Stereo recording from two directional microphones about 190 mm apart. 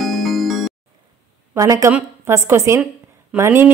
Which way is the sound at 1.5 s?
15° right (ahead or behind).